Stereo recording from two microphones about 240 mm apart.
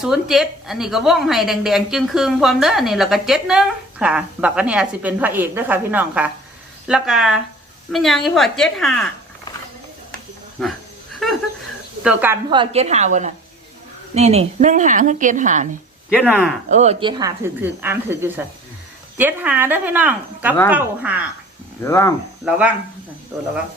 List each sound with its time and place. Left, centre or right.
0.0 s a woman's voice: centre
10.6 s a woman's voice: centre
12.0 s speech: centre
12.5 s a woman's voice: right
16.1 s a woman's voice: centre
16.6 s speech: right; by 21.1 s centre
21.8 s speech: centre
22.4 s a woman's voice: centre